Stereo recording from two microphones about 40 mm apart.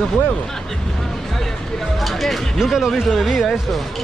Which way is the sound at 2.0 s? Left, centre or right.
Centre.